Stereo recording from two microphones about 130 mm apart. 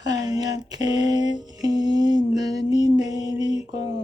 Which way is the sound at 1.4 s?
30° right (ahead or behind).